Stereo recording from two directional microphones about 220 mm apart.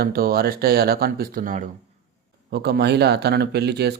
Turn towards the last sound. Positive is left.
turn(degrees=-50)  # may be behind; listen again after turning